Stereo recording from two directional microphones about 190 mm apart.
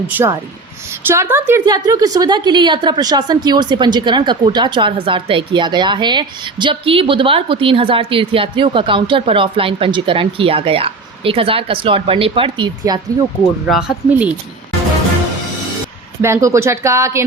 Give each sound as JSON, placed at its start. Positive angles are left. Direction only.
{"t": 0.1, "sound": "a woman's voice", "side_deg": -10}
{"t": 13.7, "sound": "speech", "side_deg": -5}
{"t": 16.2, "sound": "speech", "side_deg": -15}